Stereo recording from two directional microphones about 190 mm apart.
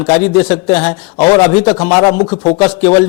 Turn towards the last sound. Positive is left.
turn(degrees=10)  # may be behind; listen again after turning